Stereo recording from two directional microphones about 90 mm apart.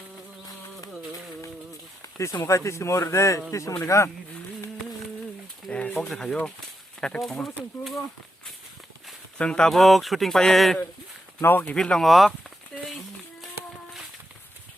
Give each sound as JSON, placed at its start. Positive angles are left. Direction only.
{"t": 2.1, "sound": "speech", "side_deg": 35}
{"t": 5.6, "sound": "bird", "side_deg": 10}
{"t": 6.0, "sound": "speech", "side_deg": 5}
{"t": 9.4, "sound": "speech", "side_deg": 10}
{"t": 11.4, "sound": "speech", "side_deg": 20}